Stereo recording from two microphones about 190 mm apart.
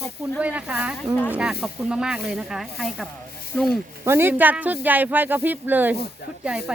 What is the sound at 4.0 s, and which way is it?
Speech, 10° right (ahead or behind).